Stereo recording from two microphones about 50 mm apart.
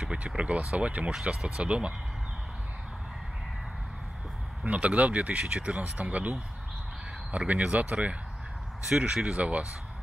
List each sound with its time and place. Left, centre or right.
0.3 s speech: right
4.6 s speech: right
8.8 s speech: centre